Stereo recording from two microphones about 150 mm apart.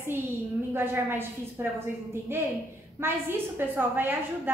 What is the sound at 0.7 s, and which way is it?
A woman's voice, 15° right (ahead or behind).